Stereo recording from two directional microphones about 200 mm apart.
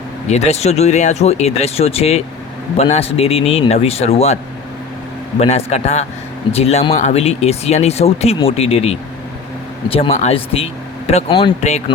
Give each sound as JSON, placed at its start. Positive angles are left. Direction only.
{"t": 0.3, "sound": "speech", "side_deg": 35}
{"t": 5.4, "sound": "speech", "side_deg": 30}